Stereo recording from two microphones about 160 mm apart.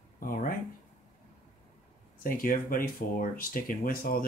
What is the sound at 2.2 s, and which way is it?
Speech, 65° left (ahead or behind).